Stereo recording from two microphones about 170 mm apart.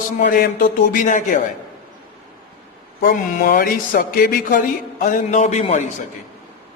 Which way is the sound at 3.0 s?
60° left (ahead or behind).